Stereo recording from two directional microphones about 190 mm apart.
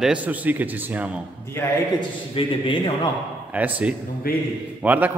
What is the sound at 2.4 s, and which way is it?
Speech, 30° left (ahead or behind).